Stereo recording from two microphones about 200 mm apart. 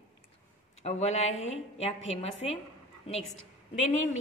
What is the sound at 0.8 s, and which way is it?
A woman's voice, 35° left (ahead or behind).